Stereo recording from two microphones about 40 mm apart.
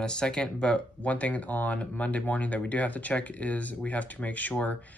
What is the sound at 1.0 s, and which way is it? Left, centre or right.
Speech, left.